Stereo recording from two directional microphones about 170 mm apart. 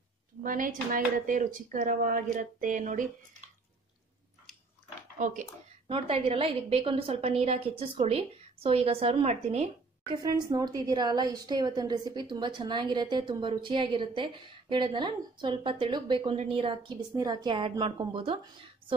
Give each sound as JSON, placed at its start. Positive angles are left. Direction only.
{"t": 0.4, "sound": "speech", "side_deg": -50}
{"t": 5.2, "sound": "speech", "side_deg": -50}
{"t": 5.9, "sound": "a woman's voice", "side_deg": -30}
{"t": 10.1, "sound": "a woman's voice", "side_deg": -20}